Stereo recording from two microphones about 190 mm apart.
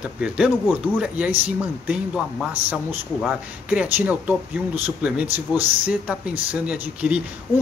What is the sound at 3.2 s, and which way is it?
Speech, 5° right (ahead or behind).